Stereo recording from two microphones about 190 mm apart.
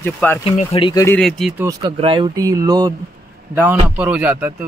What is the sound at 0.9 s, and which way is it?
Speech, 15° left (ahead or behind).